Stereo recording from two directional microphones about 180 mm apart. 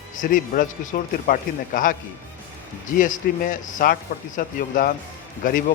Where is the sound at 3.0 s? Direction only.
50° left (ahead or behind).